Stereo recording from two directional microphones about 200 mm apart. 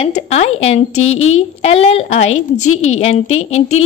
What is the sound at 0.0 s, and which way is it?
Speech, 30° left (ahead or behind).